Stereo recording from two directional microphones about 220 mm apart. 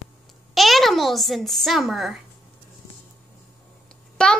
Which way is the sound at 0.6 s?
Centre (ahead or behind).